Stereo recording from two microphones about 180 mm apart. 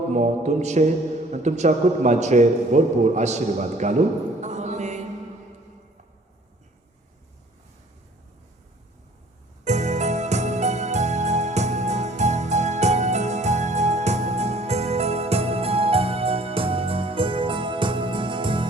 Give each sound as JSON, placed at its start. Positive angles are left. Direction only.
{"t": 0.1, "sound": "a man's voice", "side_deg": -40}
{"t": 4.4, "sound": "music", "side_deg": -40}
{"t": 9.6, "sound": "music", "side_deg": -40}